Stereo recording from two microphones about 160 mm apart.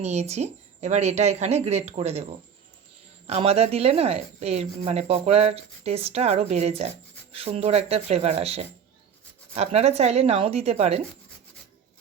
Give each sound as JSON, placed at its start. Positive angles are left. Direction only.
{"t": 0.0, "sound": "a woman's voice", "side_deg": -45}
{"t": 3.2, "sound": "speech", "side_deg": -40}